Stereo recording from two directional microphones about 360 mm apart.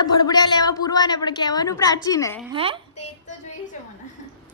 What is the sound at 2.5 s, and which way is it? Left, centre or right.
Speech, centre.